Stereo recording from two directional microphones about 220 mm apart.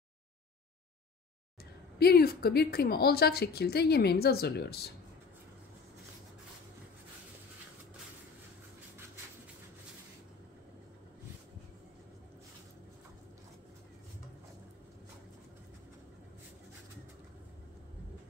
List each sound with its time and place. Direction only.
2.0 s a woman's voice: 45° left (ahead or behind)